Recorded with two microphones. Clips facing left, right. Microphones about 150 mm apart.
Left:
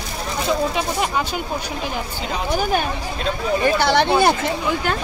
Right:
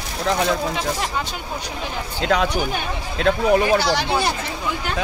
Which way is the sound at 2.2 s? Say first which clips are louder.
Right 11 dB; 90° right.